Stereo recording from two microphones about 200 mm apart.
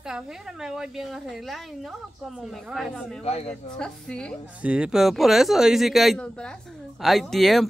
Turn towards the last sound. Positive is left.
turn(degrees=0)  # may be behind; listen again after turning